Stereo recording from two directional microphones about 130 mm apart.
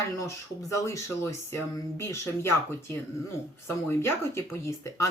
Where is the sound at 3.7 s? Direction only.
20° left (ahead or behind).